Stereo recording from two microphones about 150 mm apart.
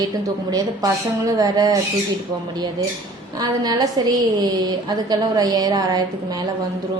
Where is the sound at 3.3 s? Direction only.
25° right (ahead or behind).